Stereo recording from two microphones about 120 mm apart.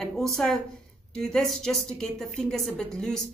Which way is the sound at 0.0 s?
5° left (ahead or behind).